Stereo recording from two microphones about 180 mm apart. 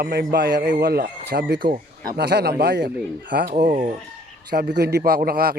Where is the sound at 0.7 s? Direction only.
55° right (ahead or behind); by 3.4 s 70° right (ahead or behind).